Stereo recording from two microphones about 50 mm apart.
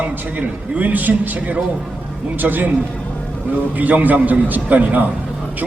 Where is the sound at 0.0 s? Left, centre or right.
Right.